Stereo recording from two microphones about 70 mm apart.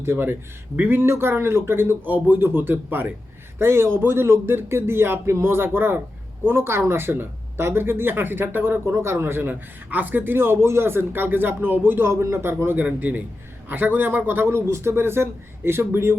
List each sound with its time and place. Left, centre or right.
0.0 s a man's voice: right